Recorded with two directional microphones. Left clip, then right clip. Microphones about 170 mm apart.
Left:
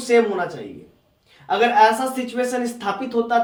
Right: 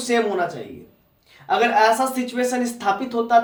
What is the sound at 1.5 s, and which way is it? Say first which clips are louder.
Speech: left 1 dB; 40° right (ahead or behind).